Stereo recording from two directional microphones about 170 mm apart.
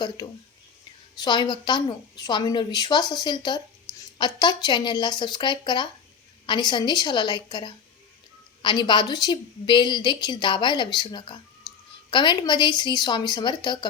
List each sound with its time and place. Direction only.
1.2 s a woman's voice: 25° left (ahead or behind)